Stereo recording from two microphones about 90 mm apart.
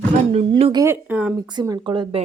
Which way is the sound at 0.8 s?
20° right (ahead or behind).